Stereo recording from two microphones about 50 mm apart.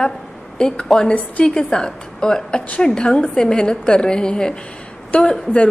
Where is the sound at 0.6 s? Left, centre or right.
Centre.